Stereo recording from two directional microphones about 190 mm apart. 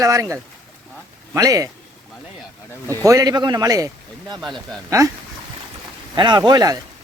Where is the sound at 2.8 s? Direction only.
15° right (ahead or behind).